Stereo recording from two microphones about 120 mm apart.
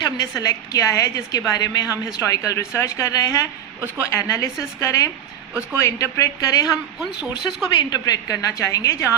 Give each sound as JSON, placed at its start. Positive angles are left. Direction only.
{"t": 0.2, "sound": "a woman's voice", "side_deg": 30}
{"t": 7.7, "sound": "a woman's voice", "side_deg": 35}